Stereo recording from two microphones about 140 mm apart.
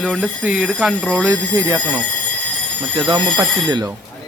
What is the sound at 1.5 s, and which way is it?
Speech, 25° right (ahead or behind).